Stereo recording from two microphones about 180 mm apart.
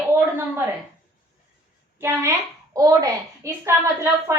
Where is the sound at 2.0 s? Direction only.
15° right (ahead or behind).